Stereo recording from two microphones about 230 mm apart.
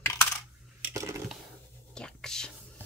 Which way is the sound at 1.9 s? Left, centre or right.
Centre.